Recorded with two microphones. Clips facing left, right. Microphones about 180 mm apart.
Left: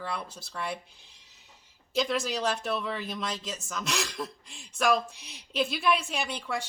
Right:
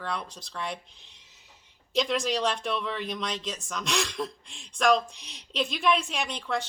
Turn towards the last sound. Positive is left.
turn(degrees=5)  # may be behind; listen again after turning